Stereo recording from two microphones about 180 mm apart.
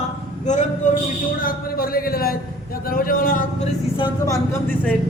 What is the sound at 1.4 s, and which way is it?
A man's voice, 55° left (ahead or behind).